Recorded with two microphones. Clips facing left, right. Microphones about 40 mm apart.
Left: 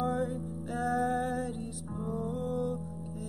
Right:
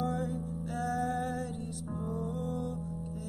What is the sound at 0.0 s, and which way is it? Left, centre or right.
Music, centre.